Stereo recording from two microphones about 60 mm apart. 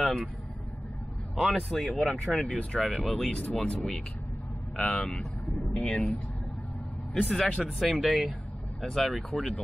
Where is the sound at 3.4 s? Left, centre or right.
Centre.